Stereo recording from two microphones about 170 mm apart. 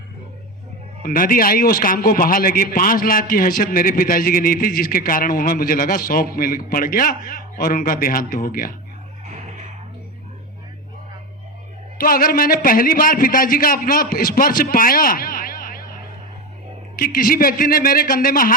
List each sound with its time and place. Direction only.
1.0 s a man's voice: 55° left (ahead or behind)
11.9 s a man's voice: 60° left (ahead or behind)
17.0 s a man's voice: 55° left (ahead or behind)